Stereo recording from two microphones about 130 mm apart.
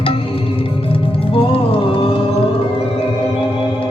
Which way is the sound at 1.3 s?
45° left (ahead or behind).